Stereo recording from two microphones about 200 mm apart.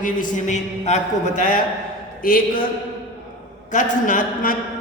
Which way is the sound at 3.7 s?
40° left (ahead or behind).